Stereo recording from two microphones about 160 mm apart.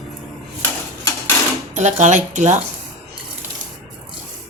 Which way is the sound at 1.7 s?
50° right (ahead or behind).